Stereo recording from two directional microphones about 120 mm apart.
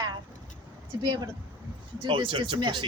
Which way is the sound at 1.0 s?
35° right (ahead or behind).